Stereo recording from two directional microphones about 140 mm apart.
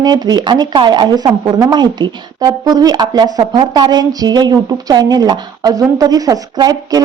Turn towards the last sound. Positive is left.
turn(degrees=-25)  # may be behind; listen again after turning